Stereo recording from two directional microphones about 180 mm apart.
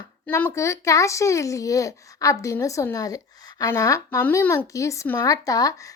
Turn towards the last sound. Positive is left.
turn(degrees=20)  # may be behind; listen again after turning